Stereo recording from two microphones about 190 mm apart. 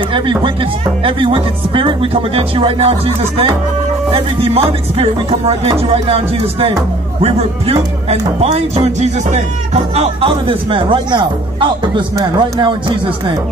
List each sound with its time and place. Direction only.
0.1 s speech: 25° right (ahead or behind)